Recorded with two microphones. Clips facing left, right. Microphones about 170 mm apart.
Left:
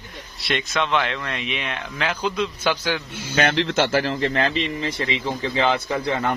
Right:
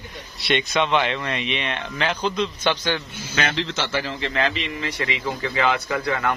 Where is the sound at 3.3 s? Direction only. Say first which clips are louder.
Left 5 dB; 60° left (ahead or behind); by 4.8 s 40° left (ahead or behind).